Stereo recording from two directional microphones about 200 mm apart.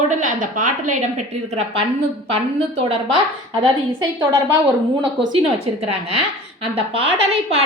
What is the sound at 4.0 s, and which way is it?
Speech, 20° right (ahead or behind).